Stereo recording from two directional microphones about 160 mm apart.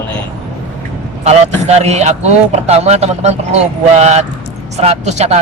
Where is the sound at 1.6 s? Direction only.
45° right (ahead or behind).